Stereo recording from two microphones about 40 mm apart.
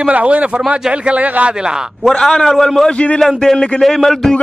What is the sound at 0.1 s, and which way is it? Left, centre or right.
Speech, right.